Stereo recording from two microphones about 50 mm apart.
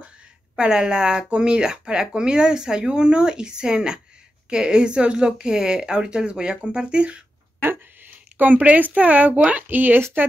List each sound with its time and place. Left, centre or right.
0.6 s speech: centre
8.4 s speech: right